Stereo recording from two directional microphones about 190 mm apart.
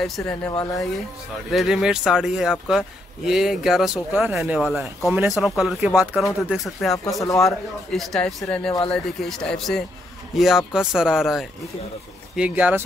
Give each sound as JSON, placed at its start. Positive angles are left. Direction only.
{"t": 0.0, "sound": "speech", "side_deg": 5}
{"t": 0.5, "sound": "speech", "side_deg": 20}
{"t": 1.5, "sound": "speech", "side_deg": 0}